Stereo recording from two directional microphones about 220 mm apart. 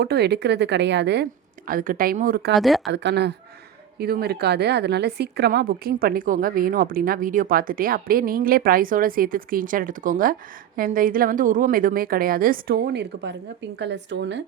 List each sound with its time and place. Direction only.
0.0 s speech: 45° right (ahead or behind)
2.5 s speech: centre (ahead or behind)
2.9 s speech: 50° right (ahead or behind)